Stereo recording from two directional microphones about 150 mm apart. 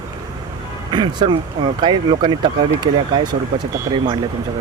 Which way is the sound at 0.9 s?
30° right (ahead or behind).